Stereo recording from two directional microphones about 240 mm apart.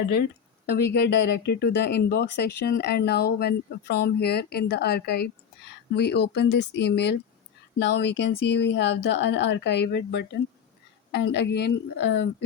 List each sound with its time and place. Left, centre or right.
0.9 s speech: left